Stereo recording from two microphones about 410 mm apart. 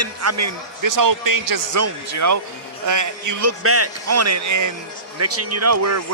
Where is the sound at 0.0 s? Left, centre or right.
Right.